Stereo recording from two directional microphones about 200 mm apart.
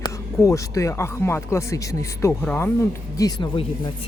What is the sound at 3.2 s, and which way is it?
Speech, 20° left (ahead or behind).